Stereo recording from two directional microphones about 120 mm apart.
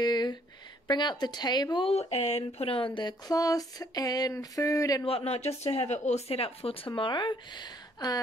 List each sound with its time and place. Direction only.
0.0 s a sound: 35° left (ahead or behind)
0.8 s speech: 40° left (ahead or behind)
1.9 s speech: 60° left (ahead or behind); by 5.0 s 30° left (ahead or behind)
5.0 s speech: 55° left (ahead or behind)
6.9 s speech: 40° left (ahead or behind)